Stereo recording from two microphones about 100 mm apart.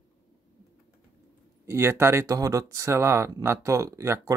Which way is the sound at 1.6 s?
25° right (ahead or behind).